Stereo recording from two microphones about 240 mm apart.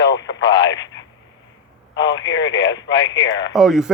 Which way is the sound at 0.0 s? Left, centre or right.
Left.